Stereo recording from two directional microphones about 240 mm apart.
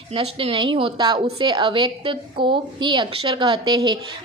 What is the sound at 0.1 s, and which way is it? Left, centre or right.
A woman's voice, right.